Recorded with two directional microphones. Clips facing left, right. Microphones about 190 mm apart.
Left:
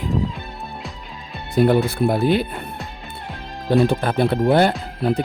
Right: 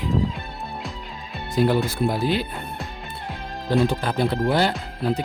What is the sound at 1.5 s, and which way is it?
Speech, 60° left (ahead or behind).